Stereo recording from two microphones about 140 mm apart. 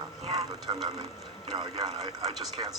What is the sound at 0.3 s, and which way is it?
Speech, 30° right (ahead or behind).